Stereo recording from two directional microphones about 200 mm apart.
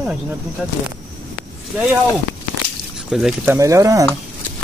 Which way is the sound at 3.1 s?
5° right (ahead or behind).